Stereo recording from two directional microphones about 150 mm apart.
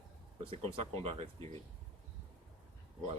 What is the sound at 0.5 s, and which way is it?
Speech, 40° right (ahead or behind).